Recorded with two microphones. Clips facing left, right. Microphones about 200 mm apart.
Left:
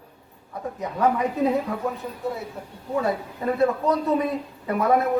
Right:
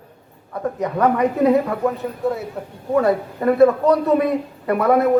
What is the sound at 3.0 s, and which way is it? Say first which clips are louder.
A man's voice: right 7 dB; 65° right (ahead or behind).